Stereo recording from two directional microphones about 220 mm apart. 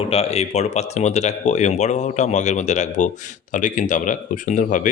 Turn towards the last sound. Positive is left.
turn(degrees=35)  # may be behind; listen again after turning